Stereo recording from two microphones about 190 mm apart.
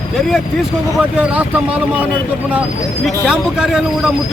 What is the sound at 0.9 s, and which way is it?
Speech, 5° right (ahead or behind).